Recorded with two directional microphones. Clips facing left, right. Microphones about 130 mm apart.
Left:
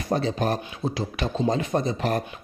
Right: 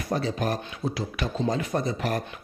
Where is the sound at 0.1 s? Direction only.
25° left (ahead or behind).